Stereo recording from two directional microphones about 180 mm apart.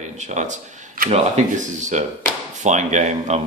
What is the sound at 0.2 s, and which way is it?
Speech, 40° right (ahead or behind).